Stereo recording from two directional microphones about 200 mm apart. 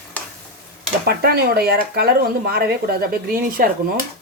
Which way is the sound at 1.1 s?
50° right (ahead or behind).